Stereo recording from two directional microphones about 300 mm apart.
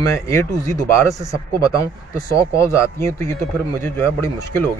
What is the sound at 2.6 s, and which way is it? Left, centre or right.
Speech, centre.